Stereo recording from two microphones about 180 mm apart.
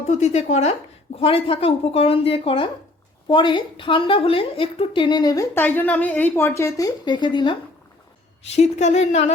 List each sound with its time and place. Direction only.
0.0 s a woman's voice: 40° left (ahead or behind)
8.5 s speech: 40° left (ahead or behind)